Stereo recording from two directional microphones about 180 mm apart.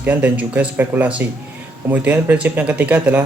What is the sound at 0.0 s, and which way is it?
Speech, 10° right (ahead or behind).